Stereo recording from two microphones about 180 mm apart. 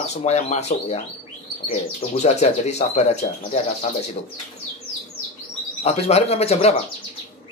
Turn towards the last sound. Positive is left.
turn(degrees=35)  # may be behind; listen again after turning